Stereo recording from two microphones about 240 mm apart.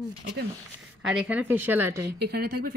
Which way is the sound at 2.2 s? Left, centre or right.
Right.